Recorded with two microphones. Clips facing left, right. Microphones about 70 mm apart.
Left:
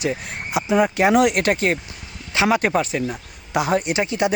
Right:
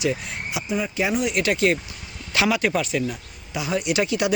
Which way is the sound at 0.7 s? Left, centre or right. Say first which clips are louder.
Left 8 dB; left.